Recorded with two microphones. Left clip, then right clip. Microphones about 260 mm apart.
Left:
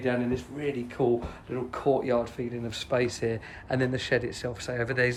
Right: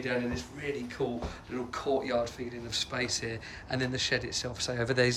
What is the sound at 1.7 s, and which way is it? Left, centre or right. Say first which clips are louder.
Speech: left 4 dB; centre.